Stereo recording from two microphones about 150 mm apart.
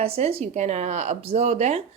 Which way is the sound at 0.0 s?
40° right (ahead or behind).